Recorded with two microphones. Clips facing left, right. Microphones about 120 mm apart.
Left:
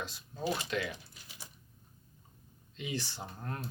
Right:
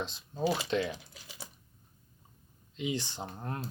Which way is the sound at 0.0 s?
25° right (ahead or behind).